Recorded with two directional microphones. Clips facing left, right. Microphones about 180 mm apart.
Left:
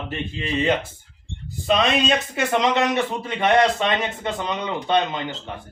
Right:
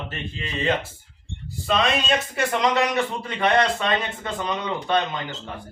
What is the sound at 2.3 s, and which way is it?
A man's voice, 20° left (ahead or behind).